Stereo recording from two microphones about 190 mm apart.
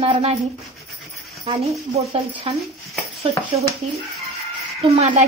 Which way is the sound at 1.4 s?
25° right (ahead or behind).